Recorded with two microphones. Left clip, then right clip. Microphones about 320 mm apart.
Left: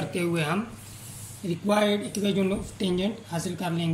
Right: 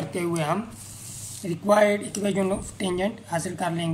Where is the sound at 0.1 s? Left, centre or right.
Centre.